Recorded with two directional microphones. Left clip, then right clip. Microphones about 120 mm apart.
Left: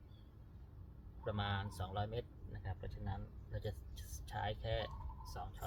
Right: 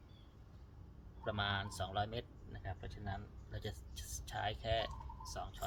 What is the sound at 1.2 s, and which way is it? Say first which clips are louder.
Speech: right 3 dB; 35° right (ahead or behind).